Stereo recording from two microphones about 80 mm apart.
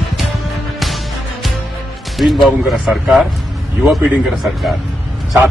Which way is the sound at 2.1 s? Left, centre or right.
Centre.